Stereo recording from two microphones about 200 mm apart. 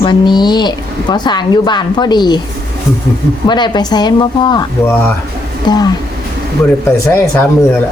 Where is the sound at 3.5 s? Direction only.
20° left (ahead or behind).